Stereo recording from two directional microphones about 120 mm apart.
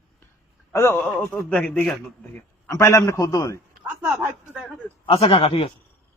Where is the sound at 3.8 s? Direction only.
15° right (ahead or behind).